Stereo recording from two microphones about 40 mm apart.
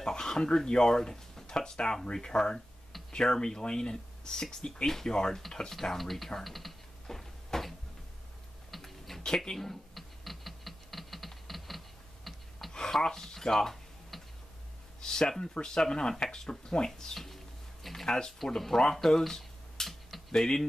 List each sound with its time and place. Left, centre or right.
0.0 s speech: centre
5.7 s typing: centre
8.7 s a sound: centre
9.2 s computer keyboard: centre
12.3 s a sound: centre
15.0 s speech: centre
18.9 s computer keyboard: centre